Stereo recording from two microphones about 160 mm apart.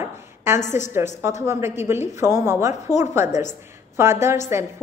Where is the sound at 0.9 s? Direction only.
15° right (ahead or behind).